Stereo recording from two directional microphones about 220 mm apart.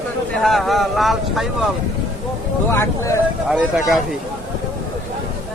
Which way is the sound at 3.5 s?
5° right (ahead or behind).